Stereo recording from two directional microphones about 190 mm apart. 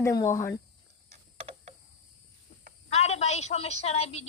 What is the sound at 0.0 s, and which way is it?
Speech, 15° left (ahead or behind).